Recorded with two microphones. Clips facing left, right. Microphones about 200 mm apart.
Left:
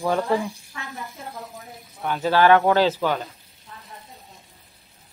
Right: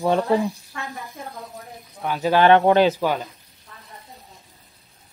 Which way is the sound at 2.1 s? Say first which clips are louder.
Right 1 dB; 15° right (ahead or behind).